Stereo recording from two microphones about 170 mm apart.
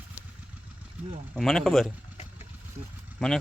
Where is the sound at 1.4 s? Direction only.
Centre (ahead or behind).